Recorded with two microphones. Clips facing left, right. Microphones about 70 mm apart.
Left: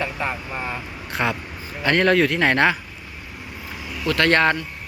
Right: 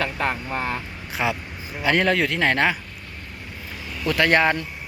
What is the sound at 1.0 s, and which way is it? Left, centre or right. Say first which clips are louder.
Speech: left 2 dB; centre.